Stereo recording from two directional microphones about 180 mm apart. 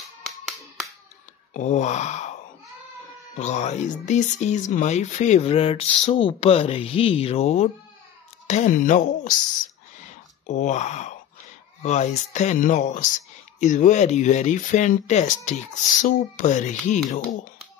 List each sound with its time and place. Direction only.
1.5 s wail: 40° left (ahead or behind)
3.3 s speech: 40° left (ahead or behind)
10.0 s a sound: 45° left (ahead or behind)
11.8 s speech: 40° left (ahead or behind)